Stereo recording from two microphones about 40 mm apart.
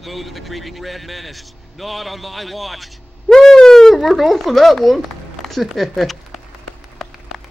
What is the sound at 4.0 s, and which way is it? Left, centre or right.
A man's voice, centre.